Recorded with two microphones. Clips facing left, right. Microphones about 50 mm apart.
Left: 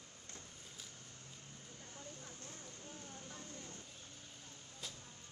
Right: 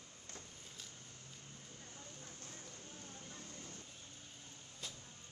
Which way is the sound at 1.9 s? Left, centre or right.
Left.